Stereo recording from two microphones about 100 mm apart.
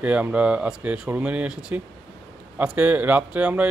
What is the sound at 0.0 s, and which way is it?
Speech, 15° right (ahead or behind).